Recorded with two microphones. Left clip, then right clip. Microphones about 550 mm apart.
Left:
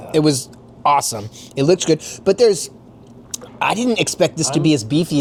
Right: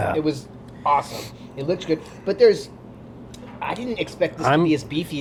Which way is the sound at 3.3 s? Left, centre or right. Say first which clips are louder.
Left 9 dB; left.